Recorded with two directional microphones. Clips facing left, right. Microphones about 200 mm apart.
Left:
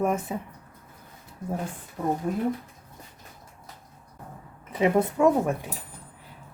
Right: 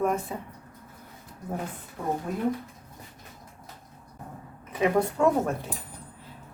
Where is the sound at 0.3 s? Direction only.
20° left (ahead or behind).